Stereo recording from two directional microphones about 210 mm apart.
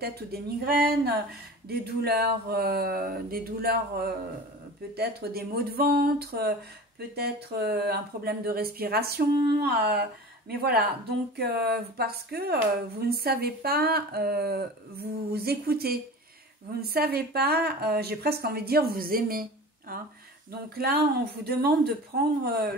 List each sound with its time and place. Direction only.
0.0 s speech: 45° right (ahead or behind)